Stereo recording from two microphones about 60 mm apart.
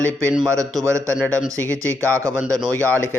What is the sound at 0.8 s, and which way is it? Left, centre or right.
A man's voice, right.